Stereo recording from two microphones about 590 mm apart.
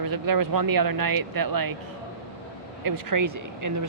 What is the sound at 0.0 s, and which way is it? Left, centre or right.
Speech, right.